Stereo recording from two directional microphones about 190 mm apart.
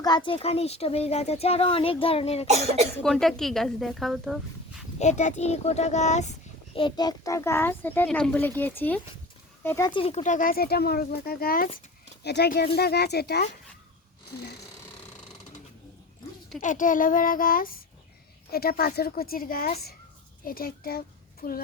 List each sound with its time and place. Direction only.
0.3 s speech: 30° left (ahead or behind)
3.0 s speech: 5° left (ahead or behind)
4.9 s speech: 35° left (ahead or behind)
6.7 s a child's voice: 25° left (ahead or behind)
9.9 s speech: 30° left (ahead or behind); by 13.5 s 60° left (ahead or behind)
16.6 s speech: 45° left (ahead or behind)